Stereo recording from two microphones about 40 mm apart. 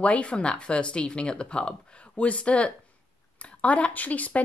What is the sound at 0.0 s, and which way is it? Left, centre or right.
Speech, left.